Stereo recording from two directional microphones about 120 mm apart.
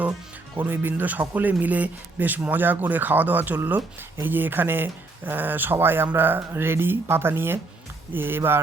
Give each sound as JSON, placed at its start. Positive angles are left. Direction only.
{"t": 0.5, "sound": "speech", "side_deg": -15}